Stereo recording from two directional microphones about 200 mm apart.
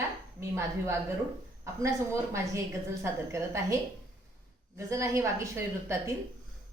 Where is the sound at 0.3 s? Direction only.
15° right (ahead or behind).